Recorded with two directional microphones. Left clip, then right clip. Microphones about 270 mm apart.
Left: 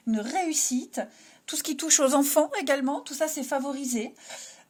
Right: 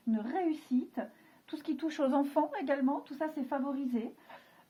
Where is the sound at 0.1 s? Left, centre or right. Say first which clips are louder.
Left 7 dB; left.